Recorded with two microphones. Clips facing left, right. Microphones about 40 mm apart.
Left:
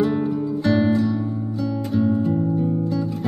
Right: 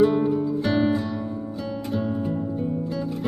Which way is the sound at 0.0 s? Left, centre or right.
Centre.